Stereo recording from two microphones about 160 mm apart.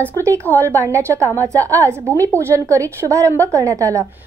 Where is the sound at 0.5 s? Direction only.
20° right (ahead or behind).